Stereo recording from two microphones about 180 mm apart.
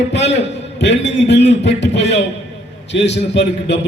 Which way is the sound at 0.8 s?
75° left (ahead or behind).